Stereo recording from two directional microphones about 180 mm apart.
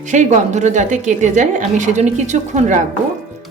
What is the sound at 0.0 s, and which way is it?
A woman's voice, 45° right (ahead or behind).